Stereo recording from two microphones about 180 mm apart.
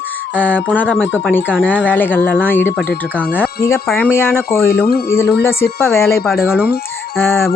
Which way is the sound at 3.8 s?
10° left (ahead or behind).